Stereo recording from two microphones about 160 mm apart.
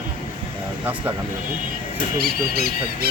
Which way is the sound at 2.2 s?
70° right (ahead or behind).